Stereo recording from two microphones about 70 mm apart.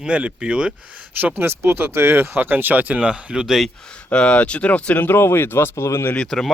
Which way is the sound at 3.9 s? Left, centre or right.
Centre.